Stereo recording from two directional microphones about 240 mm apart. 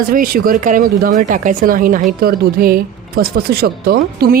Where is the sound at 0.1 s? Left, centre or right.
Right.